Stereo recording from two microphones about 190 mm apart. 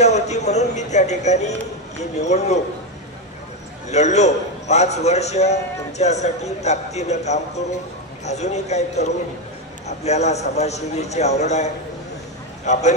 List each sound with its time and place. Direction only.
0.0 s a man's voice: 35° left (ahead or behind)
3.9 s a man's voice: 35° left (ahead or behind)